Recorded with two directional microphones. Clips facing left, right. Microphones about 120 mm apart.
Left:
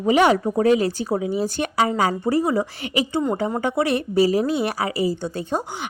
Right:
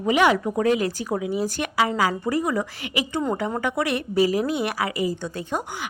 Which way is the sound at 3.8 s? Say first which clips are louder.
Left 2 dB; 35° left (ahead or behind).